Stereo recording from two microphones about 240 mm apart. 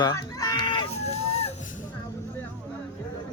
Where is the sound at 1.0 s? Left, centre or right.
Left.